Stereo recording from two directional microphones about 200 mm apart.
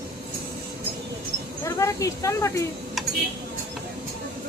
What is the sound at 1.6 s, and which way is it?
Speech, 15° left (ahead or behind).